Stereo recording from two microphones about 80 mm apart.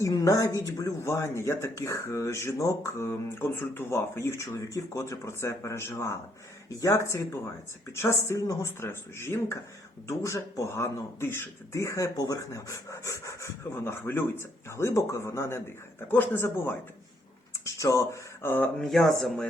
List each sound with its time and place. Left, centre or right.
0.0 s a woman's voice: left
1.0 s speech: left
17.7 s speech: left
18.8 s speech: centre